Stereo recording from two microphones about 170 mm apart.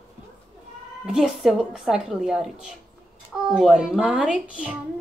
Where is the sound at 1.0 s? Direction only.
5° right (ahead or behind).